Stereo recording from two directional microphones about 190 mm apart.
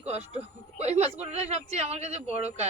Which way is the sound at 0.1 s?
35° right (ahead or behind).